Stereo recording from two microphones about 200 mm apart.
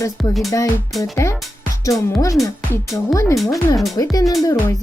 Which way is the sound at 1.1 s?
15° left (ahead or behind).